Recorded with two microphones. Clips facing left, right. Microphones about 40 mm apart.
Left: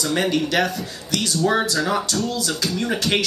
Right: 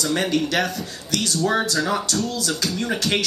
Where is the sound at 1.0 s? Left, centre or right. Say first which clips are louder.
Even; left.